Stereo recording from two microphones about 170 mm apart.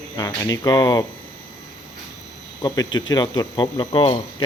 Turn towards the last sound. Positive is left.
turn(degrees=30)  # may be behind; listen again after turning